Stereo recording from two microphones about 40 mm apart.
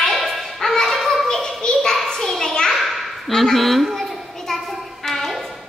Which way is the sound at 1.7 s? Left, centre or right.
Centre.